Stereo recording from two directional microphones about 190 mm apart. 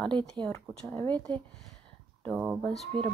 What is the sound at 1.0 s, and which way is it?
Speech, 10° left (ahead or behind).